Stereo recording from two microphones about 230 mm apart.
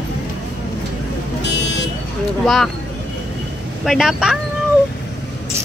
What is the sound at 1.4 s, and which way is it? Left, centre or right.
Vehicle, left.